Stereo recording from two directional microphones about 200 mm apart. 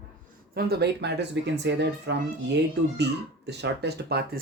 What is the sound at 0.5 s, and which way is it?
Speech, 55° right (ahead or behind).